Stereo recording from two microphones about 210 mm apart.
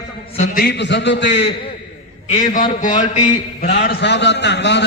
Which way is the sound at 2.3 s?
35° left (ahead or behind).